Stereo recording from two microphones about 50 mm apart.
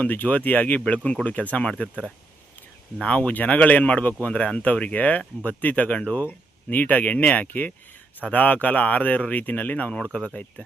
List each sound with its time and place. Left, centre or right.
0.0 s speech: left
3.0 s speech: left